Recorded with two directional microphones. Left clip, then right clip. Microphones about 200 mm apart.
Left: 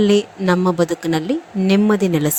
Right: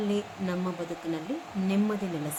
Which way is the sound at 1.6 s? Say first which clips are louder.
Left 14 dB; 45° left (ahead or behind).